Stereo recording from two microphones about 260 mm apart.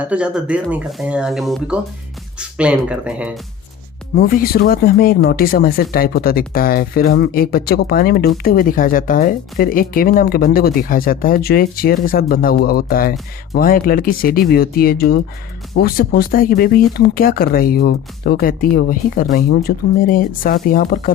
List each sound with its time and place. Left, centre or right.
0.0 s speech: centre
4.1 s speech: left